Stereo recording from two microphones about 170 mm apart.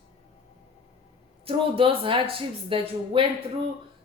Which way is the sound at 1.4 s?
30° right (ahead or behind).